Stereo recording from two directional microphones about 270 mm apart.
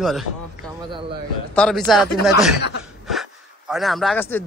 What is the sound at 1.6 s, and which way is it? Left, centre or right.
A man's voice, centre.